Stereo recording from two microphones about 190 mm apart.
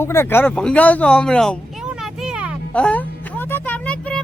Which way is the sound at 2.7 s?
5° left (ahead or behind).